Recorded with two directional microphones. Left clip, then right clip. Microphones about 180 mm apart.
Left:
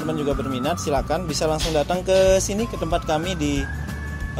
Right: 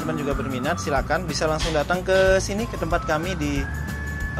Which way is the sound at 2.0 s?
30° left (ahead or behind).